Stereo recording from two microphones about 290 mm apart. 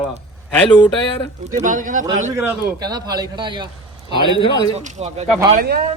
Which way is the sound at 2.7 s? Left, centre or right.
Centre.